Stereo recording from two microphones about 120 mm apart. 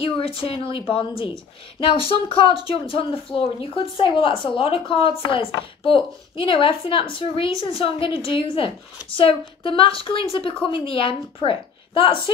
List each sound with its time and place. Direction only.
0.4 s a woman's voice: 50° left (ahead or behind)